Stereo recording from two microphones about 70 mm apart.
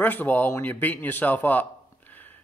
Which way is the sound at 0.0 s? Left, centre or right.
Left.